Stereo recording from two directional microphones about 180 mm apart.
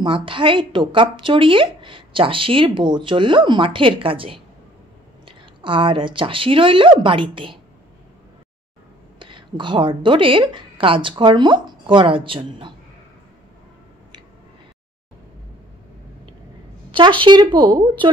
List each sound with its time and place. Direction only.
0.0 s a woman's voice: 30° right (ahead or behind)
5.6 s a woman's voice: 30° right (ahead or behind)
9.2 s a woman's voice: 25° right (ahead or behind)
16.9 s a woman's voice: 25° right (ahead or behind)